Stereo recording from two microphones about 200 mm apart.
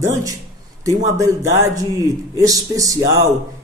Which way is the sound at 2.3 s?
15° right (ahead or behind).